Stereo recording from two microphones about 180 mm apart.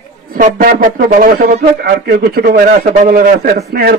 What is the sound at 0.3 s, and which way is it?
Speech, 55° right (ahead or behind).